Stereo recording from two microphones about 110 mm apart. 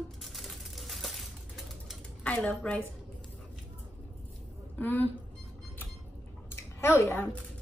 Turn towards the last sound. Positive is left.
turn(degrees=20)  # may be behind; listen again after turning